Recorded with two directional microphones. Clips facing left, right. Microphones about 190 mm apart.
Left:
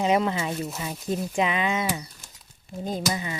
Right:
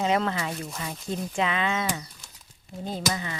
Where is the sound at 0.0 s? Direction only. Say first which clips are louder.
Left 2 dB; 15° left (ahead or behind).